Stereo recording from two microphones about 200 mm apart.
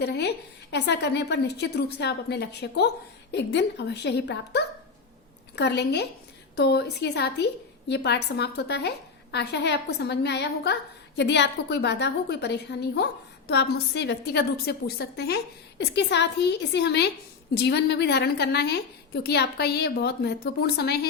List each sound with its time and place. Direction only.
0.0 s a woman's voice: 55° left (ahead or behind)